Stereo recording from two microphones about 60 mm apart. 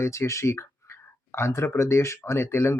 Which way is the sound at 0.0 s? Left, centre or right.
Left.